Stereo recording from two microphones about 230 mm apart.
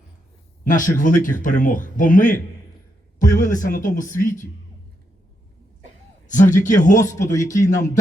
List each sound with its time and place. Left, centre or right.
0.7 s speech: left
6.2 s a man's voice: left
7.0 s speech: centre